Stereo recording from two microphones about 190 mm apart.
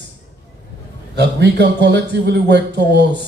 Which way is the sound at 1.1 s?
65° right (ahead or behind).